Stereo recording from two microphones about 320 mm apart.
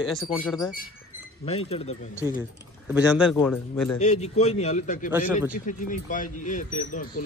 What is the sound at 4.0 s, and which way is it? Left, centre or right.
Speech, left.